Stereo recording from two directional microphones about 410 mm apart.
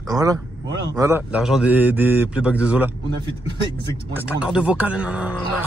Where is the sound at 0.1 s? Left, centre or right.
Centre.